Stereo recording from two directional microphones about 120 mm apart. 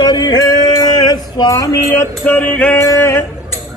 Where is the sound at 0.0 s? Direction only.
35° left (ahead or behind).